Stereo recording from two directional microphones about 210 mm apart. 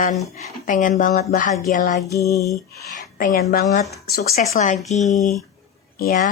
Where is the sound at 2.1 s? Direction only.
15° left (ahead or behind).